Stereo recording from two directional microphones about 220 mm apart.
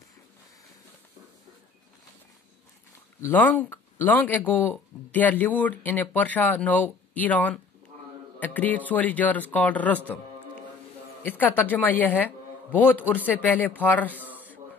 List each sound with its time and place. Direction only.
3.2 s speech: 10° left (ahead or behind)
11.2 s speech: 10° left (ahead or behind)